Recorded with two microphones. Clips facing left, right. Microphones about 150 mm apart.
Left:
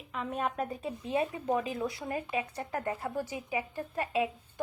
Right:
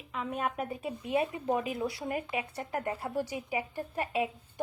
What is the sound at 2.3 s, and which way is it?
A woman's voice, 20° right (ahead or behind).